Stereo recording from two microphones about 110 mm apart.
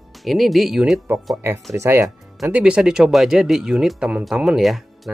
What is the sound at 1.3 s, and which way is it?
Speech, 25° right (ahead or behind).